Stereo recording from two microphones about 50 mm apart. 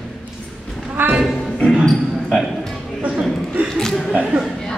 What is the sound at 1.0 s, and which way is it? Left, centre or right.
Music, right.